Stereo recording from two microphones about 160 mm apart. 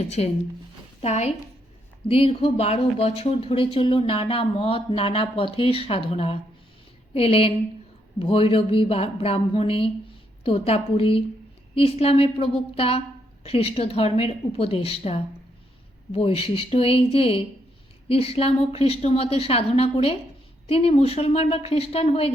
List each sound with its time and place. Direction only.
0.2 s a woman's voice: 40° left (ahead or behind)